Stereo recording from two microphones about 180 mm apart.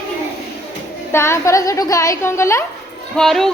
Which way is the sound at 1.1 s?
15° left (ahead or behind).